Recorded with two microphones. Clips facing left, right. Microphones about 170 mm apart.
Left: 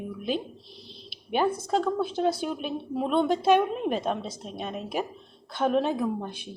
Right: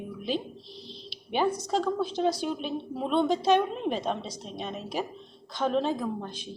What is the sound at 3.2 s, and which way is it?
Speech, 55° left (ahead or behind).